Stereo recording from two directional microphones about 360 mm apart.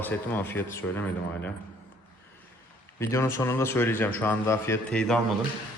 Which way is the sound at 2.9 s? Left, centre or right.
Centre.